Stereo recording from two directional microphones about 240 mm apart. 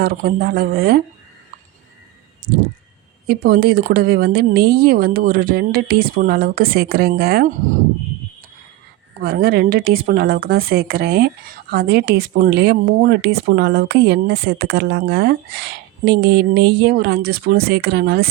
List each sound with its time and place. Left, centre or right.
0.0 s a woman's voice: right
3.2 s a woman's voice: right
9.2 s a woman's voice: right